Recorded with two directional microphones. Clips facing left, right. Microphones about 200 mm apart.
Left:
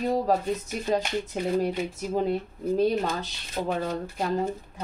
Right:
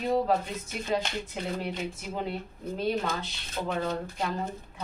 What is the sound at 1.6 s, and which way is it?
Speech, 40° left (ahead or behind).